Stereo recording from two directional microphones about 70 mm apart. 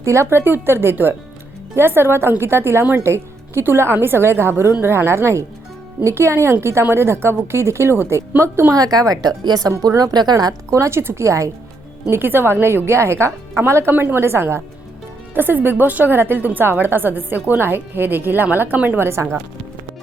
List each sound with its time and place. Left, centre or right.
0.0 s a woman's voice: right
8.7 s a woman's voice: right
10.0 s speech: right
10.7 s speech: right
12.1 s a woman's voice: right